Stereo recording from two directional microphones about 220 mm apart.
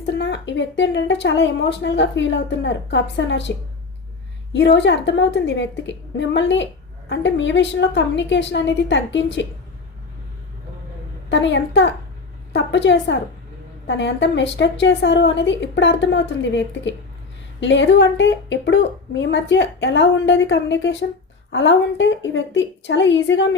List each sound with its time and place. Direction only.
0.0 s a woman's voice: 50° left (ahead or behind)
4.5 s a woman's voice: 55° left (ahead or behind)
11.3 s a woman's voice: 55° left (ahead or behind)